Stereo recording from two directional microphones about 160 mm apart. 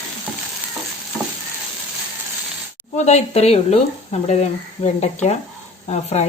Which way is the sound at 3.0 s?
45° left (ahead or behind).